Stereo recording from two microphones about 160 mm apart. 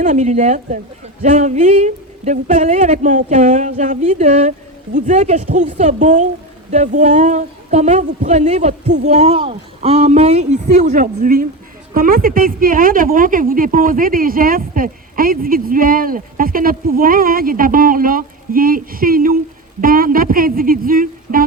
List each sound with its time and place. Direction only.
0.0 s a woman's voice: 50° right (ahead or behind)